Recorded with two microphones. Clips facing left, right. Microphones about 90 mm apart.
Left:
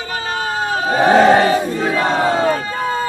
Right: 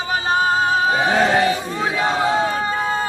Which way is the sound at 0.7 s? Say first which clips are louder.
Left 4 dB; 50° left (ahead or behind).